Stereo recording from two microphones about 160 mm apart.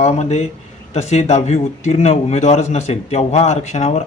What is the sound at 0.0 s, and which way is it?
A man's voice, 40° left (ahead or behind).